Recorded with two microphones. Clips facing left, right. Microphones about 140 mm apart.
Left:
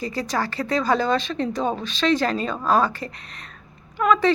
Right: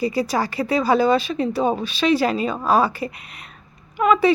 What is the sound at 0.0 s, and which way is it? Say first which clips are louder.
Speech: right 4 dB; 10° right (ahead or behind).